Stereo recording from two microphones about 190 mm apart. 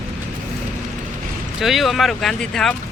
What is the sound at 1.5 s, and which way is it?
Speech, centre (ahead or behind).